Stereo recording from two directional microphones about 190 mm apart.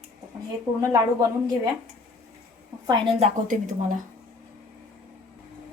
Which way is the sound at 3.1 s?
35° right (ahead or behind).